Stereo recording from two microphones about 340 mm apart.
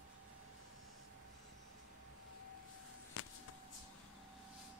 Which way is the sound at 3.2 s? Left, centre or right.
Left.